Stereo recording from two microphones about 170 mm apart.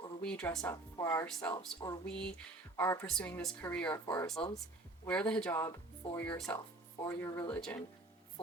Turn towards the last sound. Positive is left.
turn(degrees=10)  # may be behind; listen again after turning